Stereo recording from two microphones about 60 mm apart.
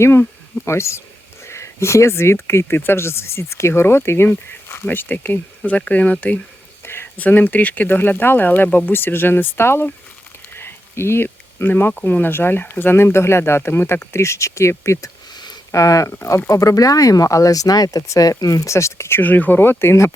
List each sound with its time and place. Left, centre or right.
0.0 s speech: left
6.8 s a sound: left
7.2 s speech: left
10.5 s a sound: left
12.0 s speech: left
15.7 s speech: left
19.2 s speech: left